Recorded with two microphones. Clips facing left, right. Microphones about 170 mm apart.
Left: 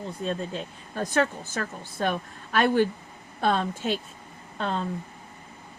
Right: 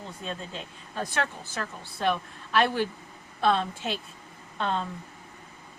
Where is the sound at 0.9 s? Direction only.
45° left (ahead or behind).